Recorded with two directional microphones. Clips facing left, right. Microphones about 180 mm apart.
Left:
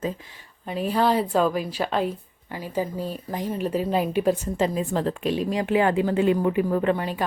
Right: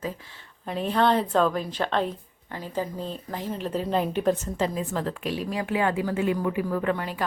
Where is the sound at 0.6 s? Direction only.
5° left (ahead or behind).